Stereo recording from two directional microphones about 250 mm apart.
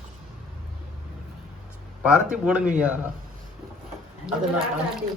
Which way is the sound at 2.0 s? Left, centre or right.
Centre.